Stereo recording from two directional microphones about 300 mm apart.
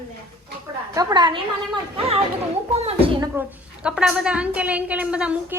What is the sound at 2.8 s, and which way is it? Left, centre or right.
Speech, centre.